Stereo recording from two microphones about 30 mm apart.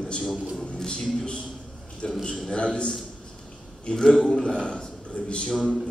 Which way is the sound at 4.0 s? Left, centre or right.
Centre.